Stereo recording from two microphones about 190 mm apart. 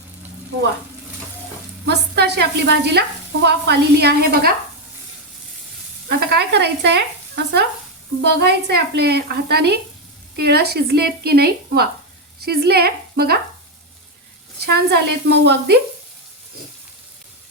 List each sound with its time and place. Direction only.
1.9 s a woman's voice: 60° right (ahead or behind)
6.1 s a woman's voice: 60° right (ahead or behind)
14.6 s a woman's voice: 60° right (ahead or behind)